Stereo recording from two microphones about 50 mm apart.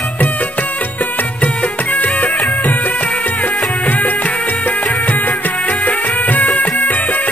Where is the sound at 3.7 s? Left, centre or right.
Left.